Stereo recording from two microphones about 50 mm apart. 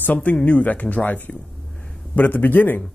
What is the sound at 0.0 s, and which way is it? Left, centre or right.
Speech, left.